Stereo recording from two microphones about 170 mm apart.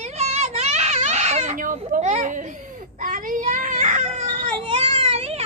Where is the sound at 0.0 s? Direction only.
40° right (ahead or behind).